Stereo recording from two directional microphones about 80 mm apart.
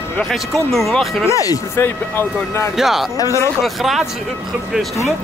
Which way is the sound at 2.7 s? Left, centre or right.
Centre.